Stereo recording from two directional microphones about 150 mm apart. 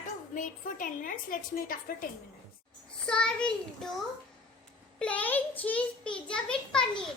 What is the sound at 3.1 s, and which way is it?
A child's voice, 5° left (ahead or behind).